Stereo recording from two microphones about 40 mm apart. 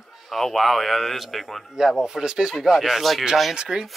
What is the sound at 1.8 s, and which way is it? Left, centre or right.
Speech, centre.